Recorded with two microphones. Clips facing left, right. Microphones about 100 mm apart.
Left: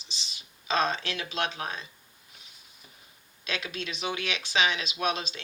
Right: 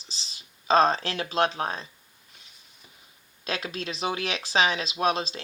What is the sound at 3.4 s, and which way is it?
Speech, 35° right (ahead or behind).